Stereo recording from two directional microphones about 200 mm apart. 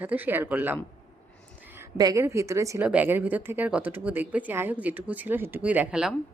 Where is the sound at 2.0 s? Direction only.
15° right (ahead or behind).